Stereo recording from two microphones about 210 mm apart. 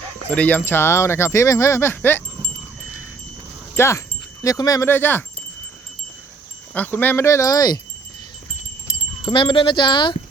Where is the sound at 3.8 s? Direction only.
15° left (ahead or behind).